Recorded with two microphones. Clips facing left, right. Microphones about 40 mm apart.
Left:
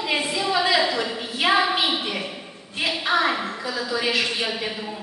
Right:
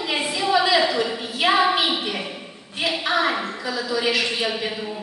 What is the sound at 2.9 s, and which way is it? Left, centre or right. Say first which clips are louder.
Speech: left 1 dB; centre.